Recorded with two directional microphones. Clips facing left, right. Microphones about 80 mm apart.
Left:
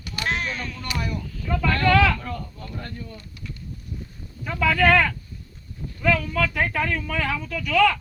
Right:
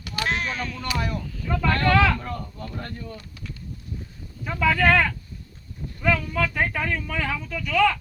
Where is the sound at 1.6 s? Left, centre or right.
Right.